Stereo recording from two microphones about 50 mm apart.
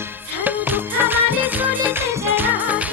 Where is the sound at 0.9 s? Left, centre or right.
Right.